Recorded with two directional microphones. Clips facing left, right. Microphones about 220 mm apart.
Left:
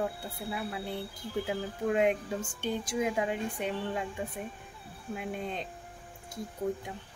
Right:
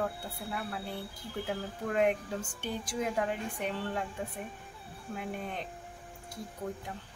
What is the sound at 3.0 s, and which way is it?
A woman's voice, 10° left (ahead or behind).